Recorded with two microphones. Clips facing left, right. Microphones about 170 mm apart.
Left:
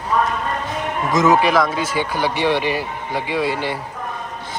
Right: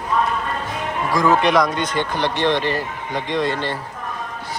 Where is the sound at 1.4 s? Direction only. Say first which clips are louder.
Even; 5° left (ahead or behind).